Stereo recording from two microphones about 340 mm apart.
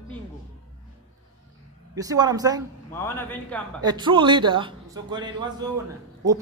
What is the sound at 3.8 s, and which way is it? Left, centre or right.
A woman's voice, centre.